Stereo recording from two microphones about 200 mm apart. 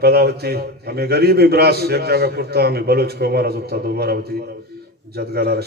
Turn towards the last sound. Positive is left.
turn(degrees=-50)  # may be behind; listen again after turning